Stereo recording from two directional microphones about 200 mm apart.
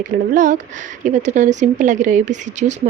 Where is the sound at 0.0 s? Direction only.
40° right (ahead or behind).